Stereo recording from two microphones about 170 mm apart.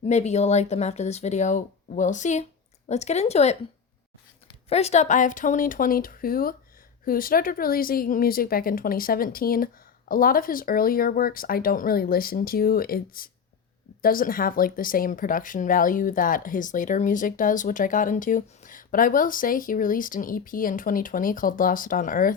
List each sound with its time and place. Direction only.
0.0 s speech: 40° left (ahead or behind)
4.7 s speech: 40° left (ahead or behind); by 22.3 s 55° left (ahead or behind)